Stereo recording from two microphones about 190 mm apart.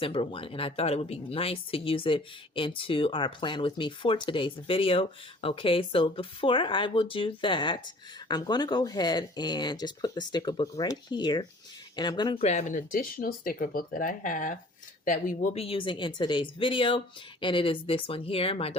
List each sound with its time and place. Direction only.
0.0 s speech: 30° left (ahead or behind); by 15.4 s 45° left (ahead or behind)
15.5 s speech: 30° left (ahead or behind)